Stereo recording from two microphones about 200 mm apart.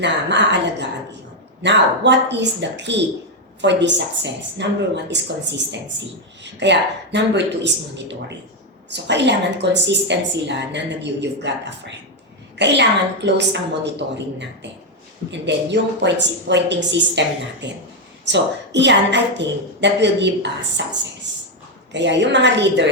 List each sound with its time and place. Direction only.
0.0 s a woman's voice: 60° right (ahead or behind)